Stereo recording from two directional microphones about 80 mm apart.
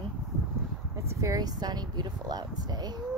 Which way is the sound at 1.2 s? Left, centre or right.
Right.